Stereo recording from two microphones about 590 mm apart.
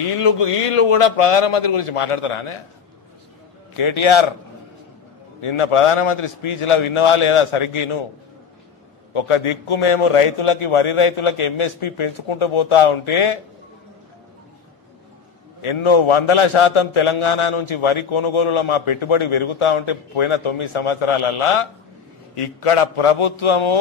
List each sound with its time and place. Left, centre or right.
0.1 s a man's voice: left
3.7 s a man's voice: left
5.4 s a man's voice: left
9.1 s a man's voice: left
15.6 s a man's voice: left